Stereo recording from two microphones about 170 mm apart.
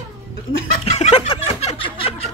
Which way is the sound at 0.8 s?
40° left (ahead or behind).